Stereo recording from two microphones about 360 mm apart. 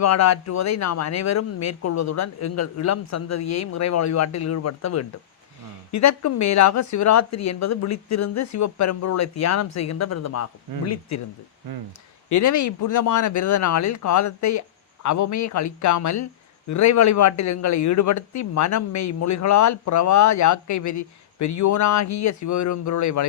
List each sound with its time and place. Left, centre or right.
0.0 s speech: left
12.3 s speech: left